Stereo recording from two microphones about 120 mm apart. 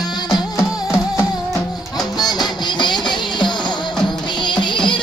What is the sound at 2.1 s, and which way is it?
Music, 35° left (ahead or behind).